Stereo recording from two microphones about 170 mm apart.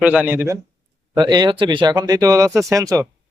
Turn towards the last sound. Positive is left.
turn(degrees=-20)  # may be behind; listen again after turning